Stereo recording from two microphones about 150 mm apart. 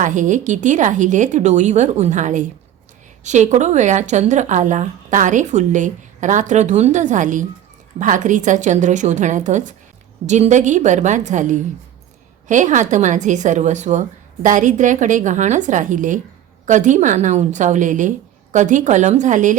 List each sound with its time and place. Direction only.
0.0 s speech: 55° right (ahead or behind)